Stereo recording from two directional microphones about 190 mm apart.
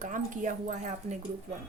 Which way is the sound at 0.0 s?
45° right (ahead or behind).